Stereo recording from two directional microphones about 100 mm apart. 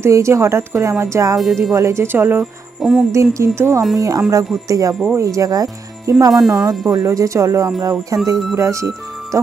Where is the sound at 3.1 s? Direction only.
25° right (ahead or behind).